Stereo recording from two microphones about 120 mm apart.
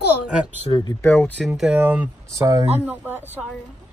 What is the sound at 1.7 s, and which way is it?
Speech, 15° right (ahead or behind).